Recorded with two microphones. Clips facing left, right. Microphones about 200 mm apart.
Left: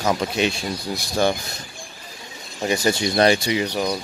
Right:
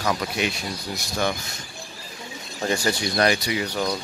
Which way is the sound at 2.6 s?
20° left (ahead or behind).